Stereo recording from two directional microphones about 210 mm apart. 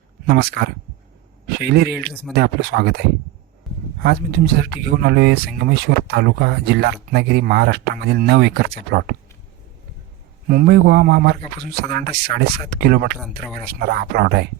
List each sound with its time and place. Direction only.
0.3 s speech: 50° right (ahead or behind)
4.0 s speech: 50° right (ahead or behind)
10.5 s speech: 45° right (ahead or behind)
13.4 s speech: centre (ahead or behind)
13.7 s speech: 50° right (ahead or behind)